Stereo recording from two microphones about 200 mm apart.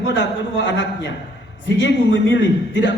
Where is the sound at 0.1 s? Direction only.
65° left (ahead or behind).